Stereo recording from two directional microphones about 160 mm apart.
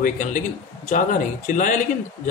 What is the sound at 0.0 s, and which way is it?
Speech, 55° left (ahead or behind).